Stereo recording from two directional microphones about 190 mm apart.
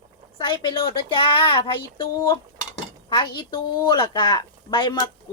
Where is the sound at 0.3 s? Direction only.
25° left (ahead or behind).